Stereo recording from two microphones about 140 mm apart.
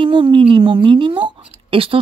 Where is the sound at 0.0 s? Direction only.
35° right (ahead or behind).